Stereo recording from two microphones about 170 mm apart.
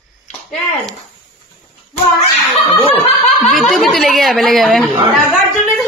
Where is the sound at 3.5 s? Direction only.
Centre (ahead or behind).